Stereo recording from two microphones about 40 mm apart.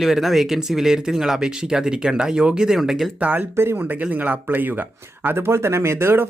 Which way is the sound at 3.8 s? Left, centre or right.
Right.